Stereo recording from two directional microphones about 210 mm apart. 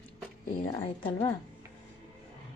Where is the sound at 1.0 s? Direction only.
20° left (ahead or behind).